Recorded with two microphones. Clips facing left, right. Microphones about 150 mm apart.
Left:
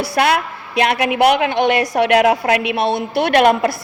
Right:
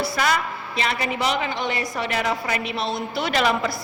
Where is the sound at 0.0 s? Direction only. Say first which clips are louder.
Left 6 dB; 65° left (ahead or behind).